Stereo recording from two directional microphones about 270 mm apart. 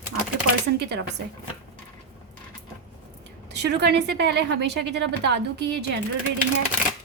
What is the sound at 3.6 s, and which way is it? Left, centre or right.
A woman's voice, right.